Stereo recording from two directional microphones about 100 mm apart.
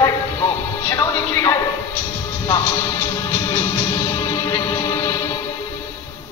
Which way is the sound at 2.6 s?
25° left (ahead or behind).